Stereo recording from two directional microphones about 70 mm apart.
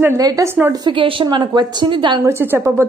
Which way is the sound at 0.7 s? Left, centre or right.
Right.